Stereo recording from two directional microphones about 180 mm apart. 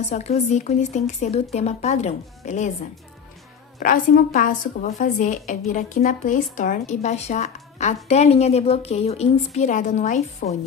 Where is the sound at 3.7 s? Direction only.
50° left (ahead or behind).